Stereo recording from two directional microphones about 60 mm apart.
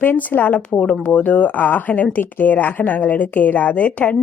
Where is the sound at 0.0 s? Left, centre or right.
Left.